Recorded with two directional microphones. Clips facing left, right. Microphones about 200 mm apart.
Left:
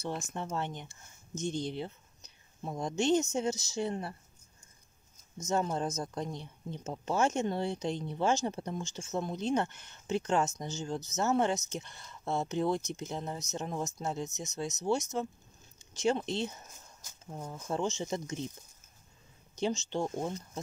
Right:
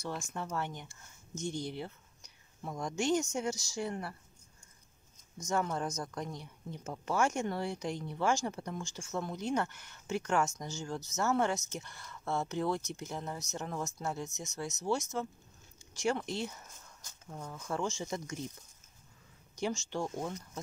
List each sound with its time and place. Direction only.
0.0 s speech: 20° left (ahead or behind)
5.4 s speech: 25° left (ahead or behind)
19.5 s speech: 20° left (ahead or behind)